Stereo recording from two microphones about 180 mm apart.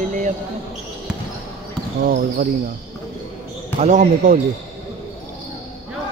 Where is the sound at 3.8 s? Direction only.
45° right (ahead or behind).